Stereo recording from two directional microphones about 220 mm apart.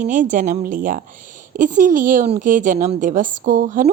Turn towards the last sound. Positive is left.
turn(degrees=-35)  # may be behind; listen again after turning